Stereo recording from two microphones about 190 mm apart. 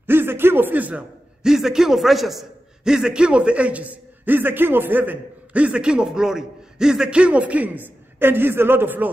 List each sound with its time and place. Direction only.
0.0 s a man's voice: 10° right (ahead or behind)